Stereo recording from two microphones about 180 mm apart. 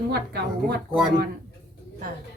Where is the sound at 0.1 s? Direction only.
65° right (ahead or behind).